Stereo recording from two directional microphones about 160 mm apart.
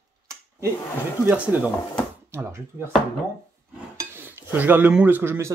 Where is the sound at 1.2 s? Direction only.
10° right (ahead or behind).